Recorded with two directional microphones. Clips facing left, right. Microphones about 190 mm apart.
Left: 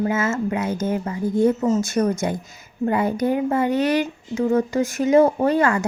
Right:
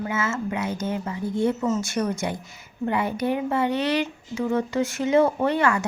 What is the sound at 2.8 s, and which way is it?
Speech, 40° left (ahead or behind).